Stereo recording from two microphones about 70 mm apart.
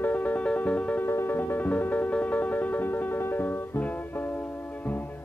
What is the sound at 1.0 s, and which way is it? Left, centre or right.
Music, left.